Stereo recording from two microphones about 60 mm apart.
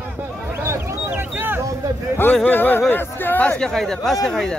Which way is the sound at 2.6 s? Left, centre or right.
Left.